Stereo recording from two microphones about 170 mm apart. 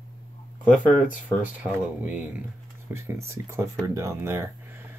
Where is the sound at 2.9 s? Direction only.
15° right (ahead or behind).